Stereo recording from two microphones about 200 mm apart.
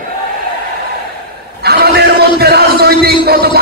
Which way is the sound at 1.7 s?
55° right (ahead or behind).